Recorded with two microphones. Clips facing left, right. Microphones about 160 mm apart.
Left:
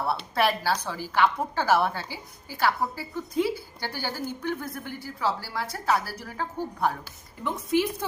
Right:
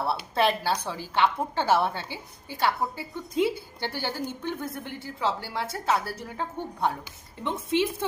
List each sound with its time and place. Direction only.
0.3 s a woman's voice: 25° right (ahead or behind)